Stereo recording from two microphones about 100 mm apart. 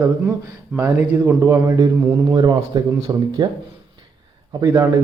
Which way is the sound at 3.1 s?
35° right (ahead or behind).